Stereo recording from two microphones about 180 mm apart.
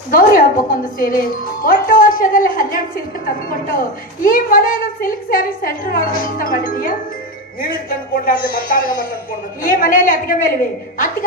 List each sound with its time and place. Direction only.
0.1 s a woman's voice: 50° left (ahead or behind)